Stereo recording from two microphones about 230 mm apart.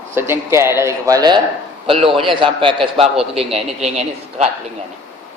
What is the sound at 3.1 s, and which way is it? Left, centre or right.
Speech, centre.